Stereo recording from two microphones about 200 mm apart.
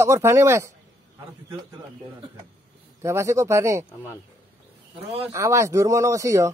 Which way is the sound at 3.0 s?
15° right (ahead or behind).